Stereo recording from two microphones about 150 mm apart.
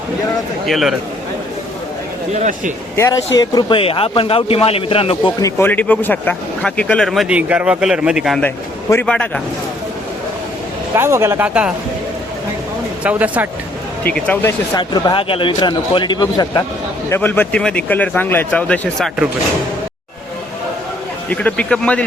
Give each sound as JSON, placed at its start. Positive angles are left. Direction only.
{"t": 0.6, "sound": "speech", "side_deg": 0}
{"t": 2.3, "sound": "speech", "side_deg": -55}
{"t": 2.9, "sound": "speech", "side_deg": 20}
{"t": 5.4, "sound": "speech", "side_deg": 20}
{"t": 8.4, "sound": "a man's voice", "side_deg": 15}
{"t": 10.9, "sound": "speech", "side_deg": -15}
{"t": 13.0, "sound": "speech", "side_deg": -10}
{"t": 14.0, "sound": "a man's voice", "side_deg": 10}
{"t": 14.8, "sound": "speech", "side_deg": 30}
{"t": 17.1, "sound": "a man's voice", "side_deg": 15}
{"t": 21.2, "sound": "a man's voice", "side_deg": 10}